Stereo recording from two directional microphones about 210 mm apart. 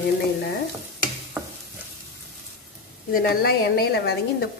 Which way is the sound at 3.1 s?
45° left (ahead or behind).